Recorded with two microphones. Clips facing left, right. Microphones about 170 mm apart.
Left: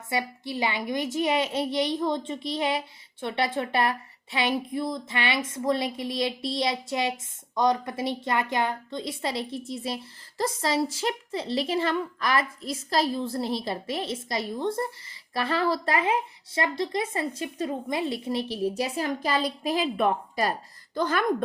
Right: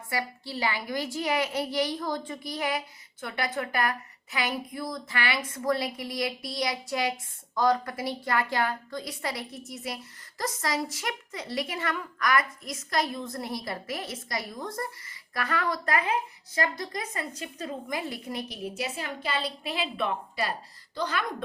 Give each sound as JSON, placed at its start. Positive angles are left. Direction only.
{"t": 0.1, "sound": "a woman's voice", "side_deg": 20}